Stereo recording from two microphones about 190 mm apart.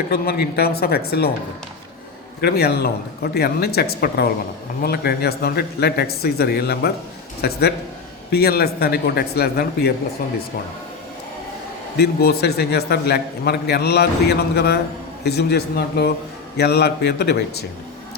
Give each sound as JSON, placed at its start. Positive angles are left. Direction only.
{"t": 0.1, "sound": "a man's voice", "side_deg": 55}
{"t": 2.4, "sound": "a man's voice", "side_deg": 55}
{"t": 11.9, "sound": "a man's voice", "side_deg": 55}